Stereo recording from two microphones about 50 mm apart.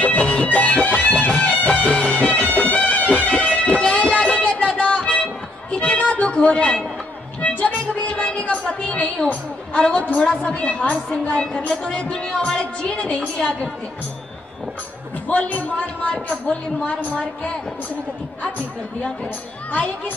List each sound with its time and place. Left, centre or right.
0.0 s music: left
8.5 s a sound: left
9.8 s a woman's voice: left
15.2 s a woman's voice: left